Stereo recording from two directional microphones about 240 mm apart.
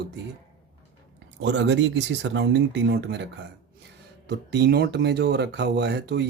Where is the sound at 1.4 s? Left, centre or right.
Right.